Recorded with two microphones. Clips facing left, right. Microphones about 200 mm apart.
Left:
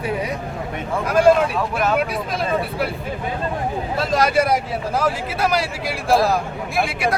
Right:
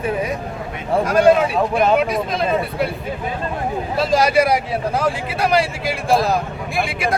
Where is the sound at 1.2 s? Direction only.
Centre (ahead or behind).